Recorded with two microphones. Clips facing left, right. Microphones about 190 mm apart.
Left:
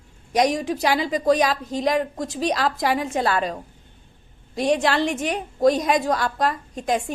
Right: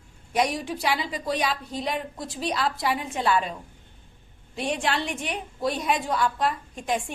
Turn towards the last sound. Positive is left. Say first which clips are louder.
# left 4 dB
turn(degrees=40)  # may be behind; listen again after turning